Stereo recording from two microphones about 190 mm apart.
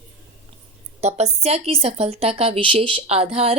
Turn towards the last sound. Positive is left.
turn(degrees=-30)  # may be behind; listen again after turning